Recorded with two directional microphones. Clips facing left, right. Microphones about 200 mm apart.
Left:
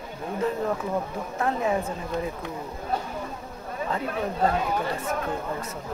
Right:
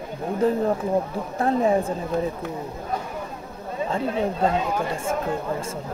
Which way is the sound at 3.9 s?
25° right (ahead or behind).